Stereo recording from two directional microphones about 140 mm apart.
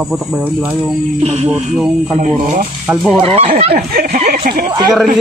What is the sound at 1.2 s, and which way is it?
Speech, 50° right (ahead or behind).